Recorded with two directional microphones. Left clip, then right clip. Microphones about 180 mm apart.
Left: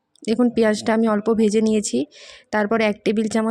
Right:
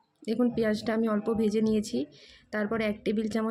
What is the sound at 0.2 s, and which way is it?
Speech, 45° left (ahead or behind).